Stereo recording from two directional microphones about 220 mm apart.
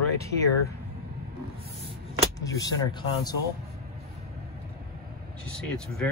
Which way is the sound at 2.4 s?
15° left (ahead or behind).